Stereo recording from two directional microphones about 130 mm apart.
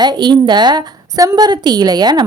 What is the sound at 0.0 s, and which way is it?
A woman's voice, 35° right (ahead or behind).